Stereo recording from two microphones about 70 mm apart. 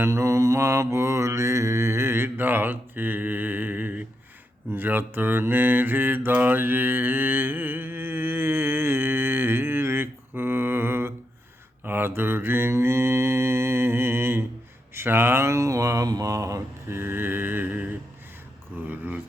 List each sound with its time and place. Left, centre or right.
0.0 s mantra: right
14.9 s speech: right
16.0 s mantra: right
16.9 s mantra: right
18.8 s a sound: right